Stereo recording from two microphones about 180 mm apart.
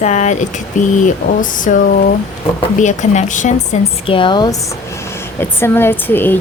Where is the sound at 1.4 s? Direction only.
45° left (ahead or behind).